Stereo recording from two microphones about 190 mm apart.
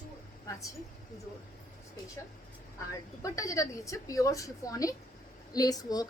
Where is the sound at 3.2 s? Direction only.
15° left (ahead or behind).